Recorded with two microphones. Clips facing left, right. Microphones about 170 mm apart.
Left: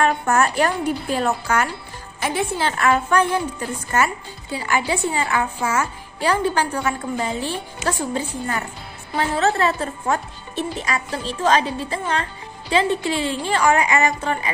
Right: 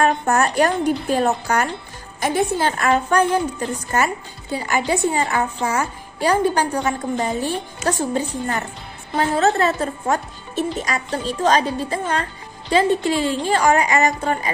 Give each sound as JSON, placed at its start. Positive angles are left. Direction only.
{"t": 0.0, "sound": "a woman's voice", "side_deg": -40}